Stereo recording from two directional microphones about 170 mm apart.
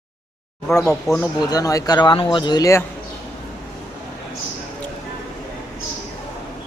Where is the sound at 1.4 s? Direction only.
20° left (ahead or behind).